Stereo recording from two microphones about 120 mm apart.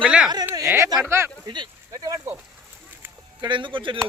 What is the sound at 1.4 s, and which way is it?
Speech, 40° right (ahead or behind).